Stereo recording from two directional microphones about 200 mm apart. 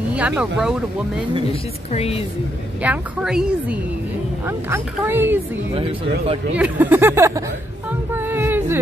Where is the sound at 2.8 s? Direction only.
5° right (ahead or behind).